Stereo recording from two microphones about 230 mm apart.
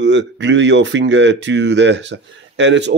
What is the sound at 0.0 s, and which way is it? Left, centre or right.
Speech, right.